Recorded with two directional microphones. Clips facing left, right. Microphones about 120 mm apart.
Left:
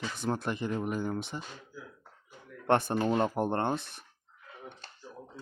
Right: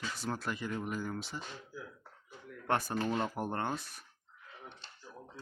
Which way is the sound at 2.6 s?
25° left (ahead or behind).